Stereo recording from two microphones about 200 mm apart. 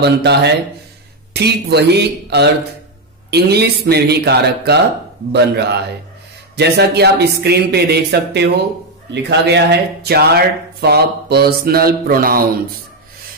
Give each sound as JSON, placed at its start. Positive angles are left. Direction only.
{"t": 0.0, "sound": "speech", "side_deg": -55}